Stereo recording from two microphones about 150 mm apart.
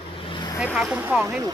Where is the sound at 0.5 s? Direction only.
5° right (ahead or behind).